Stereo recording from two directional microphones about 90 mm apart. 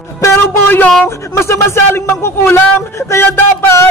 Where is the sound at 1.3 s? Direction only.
35° left (ahead or behind).